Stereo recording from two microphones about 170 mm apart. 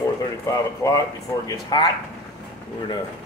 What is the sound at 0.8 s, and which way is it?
Speech, 15° left (ahead or behind).